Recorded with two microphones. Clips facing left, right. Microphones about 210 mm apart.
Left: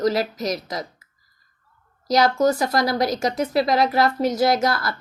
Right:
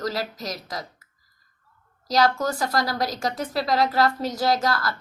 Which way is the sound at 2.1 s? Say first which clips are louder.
Left 4 dB; 15° left (ahead or behind).